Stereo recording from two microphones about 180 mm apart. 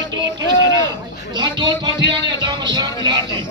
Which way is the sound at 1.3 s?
25° right (ahead or behind).